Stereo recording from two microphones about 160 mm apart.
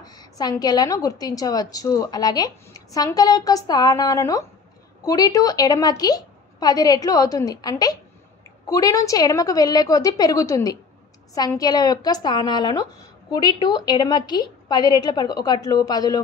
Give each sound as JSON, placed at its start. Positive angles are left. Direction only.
{"t": 0.0, "sound": "a woman's voice", "side_deg": 25}